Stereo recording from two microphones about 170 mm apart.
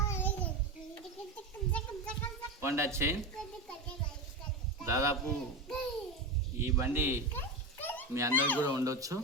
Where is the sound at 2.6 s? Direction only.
15° right (ahead or behind).